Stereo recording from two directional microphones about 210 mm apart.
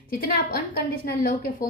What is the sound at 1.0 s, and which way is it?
Speech, 40° left (ahead or behind).